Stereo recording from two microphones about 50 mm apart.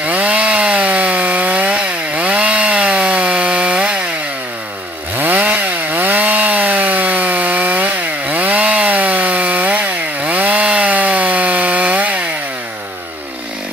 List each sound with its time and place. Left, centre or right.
0.0 s chainsaw: right
5.1 s chainsaw: right